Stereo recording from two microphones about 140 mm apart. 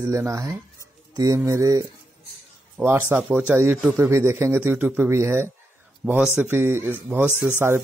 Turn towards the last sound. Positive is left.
turn(degrees=-15)  # may be behind; listen again after turning